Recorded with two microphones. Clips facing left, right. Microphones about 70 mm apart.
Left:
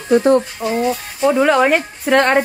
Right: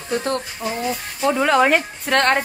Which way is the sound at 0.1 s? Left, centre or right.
Centre.